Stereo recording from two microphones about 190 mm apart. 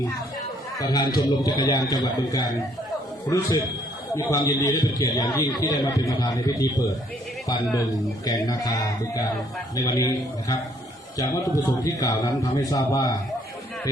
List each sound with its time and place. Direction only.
0.8 s a man's voice: 20° left (ahead or behind)